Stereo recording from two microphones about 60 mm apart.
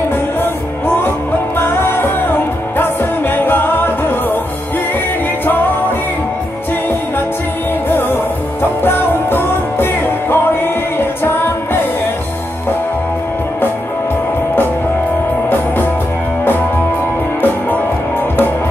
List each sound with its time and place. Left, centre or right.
1.6 s music: left
8.8 s music: left